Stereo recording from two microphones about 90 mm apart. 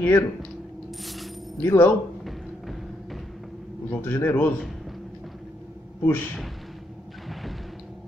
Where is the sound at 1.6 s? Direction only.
25° left (ahead or behind).